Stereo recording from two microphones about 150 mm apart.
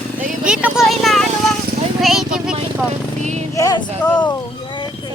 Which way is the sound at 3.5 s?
25° left (ahead or behind).